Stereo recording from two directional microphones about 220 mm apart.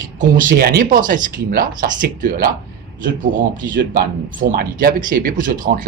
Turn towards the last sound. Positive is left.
turn(degrees=-35)  # may be behind; listen again after turning